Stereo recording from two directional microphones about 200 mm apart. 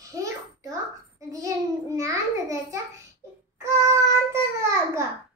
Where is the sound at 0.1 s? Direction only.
15° right (ahead or behind).